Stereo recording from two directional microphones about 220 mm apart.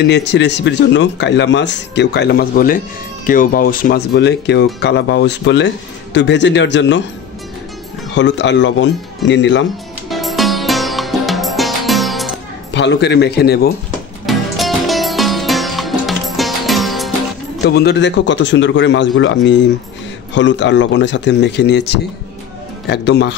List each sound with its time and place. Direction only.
0.0 s speech: 50° left (ahead or behind)
8.1 s speech: 55° left (ahead or behind)
10.0 s music: centre (ahead or behind)
12.7 s speech: 50° left (ahead or behind)
14.2 s music: centre (ahead or behind)
17.6 s speech: 50° left (ahead or behind)